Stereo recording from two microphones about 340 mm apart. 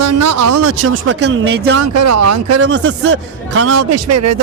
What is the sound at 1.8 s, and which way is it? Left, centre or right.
Speech, right.